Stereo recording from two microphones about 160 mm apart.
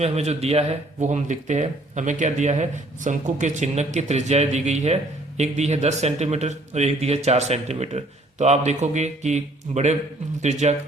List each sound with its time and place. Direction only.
0.0 s speech: 40° right (ahead or behind)